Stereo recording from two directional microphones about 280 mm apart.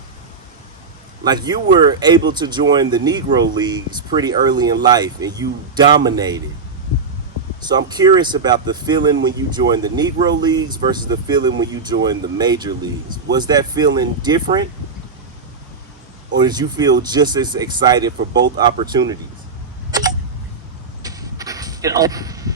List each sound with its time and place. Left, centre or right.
1.2 s speech: centre
7.6 s speech: centre
16.4 s speech: centre
19.9 s tick: centre
21.0 s a sound: centre